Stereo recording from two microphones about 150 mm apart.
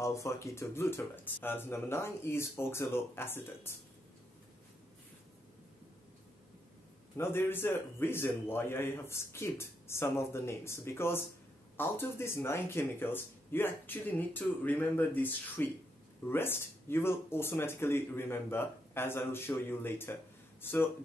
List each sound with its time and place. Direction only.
0.0 s a man's voice: 20° left (ahead or behind)
7.2 s a man's voice: 15° left (ahead or behind)